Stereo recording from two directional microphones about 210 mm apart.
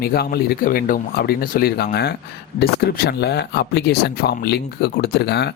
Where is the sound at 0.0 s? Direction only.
45° left (ahead or behind).